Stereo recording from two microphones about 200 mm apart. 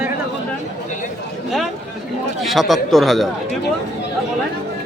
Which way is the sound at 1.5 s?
Centre (ahead or behind).